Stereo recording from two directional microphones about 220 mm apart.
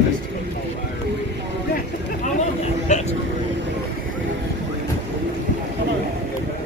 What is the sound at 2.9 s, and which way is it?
Vehicle, 30° left (ahead or behind).